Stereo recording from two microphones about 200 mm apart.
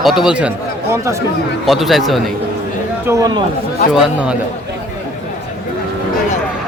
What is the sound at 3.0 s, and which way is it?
Speech, 15° right (ahead or behind).